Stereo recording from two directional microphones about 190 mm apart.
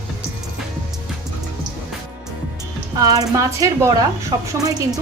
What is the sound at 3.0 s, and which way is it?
Speech, 20° right (ahead or behind).